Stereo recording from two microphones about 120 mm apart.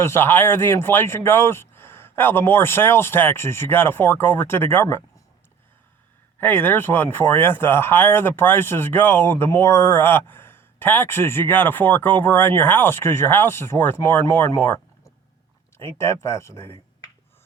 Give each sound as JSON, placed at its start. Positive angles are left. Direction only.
{"t": 0.0, "sound": "speech", "side_deg": 20}
{"t": 6.4, "sound": "speech", "side_deg": 15}